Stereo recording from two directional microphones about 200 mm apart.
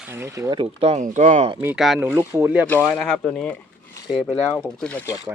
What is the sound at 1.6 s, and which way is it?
Speech, 5° right (ahead or behind).